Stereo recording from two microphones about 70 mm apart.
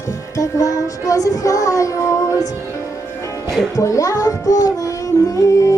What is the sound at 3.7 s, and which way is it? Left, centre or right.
Music, left.